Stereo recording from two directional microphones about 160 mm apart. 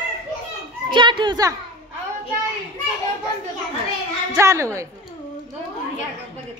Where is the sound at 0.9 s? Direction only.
30° right (ahead or behind).